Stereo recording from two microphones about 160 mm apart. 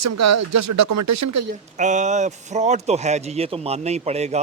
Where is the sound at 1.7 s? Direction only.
50° right (ahead or behind).